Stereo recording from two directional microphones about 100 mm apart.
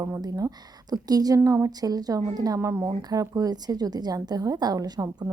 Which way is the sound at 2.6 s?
25° right (ahead or behind).